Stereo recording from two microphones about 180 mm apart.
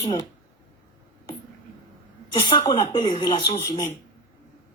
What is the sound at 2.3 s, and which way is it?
Speech, 25° left (ahead or behind).